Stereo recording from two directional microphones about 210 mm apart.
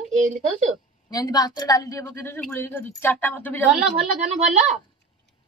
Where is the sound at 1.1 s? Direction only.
20° left (ahead or behind).